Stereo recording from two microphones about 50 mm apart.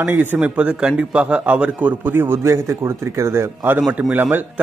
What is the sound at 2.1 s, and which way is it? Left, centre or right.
Speech, right.